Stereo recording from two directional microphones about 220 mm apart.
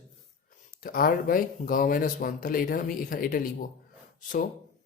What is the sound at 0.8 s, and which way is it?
Speech, 40° left (ahead or behind).